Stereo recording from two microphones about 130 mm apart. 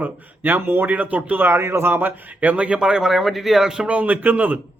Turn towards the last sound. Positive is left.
turn(degrees=-10)  # may be behind; listen again after turning